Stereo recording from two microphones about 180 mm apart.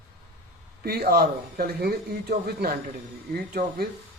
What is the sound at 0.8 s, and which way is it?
Speech, 55° right (ahead or behind).